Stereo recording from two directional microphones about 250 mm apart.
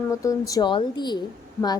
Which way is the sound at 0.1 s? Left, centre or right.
Centre.